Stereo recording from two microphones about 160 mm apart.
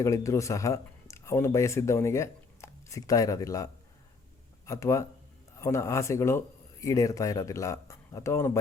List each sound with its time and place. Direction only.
0.0 s speech: 20° left (ahead or behind)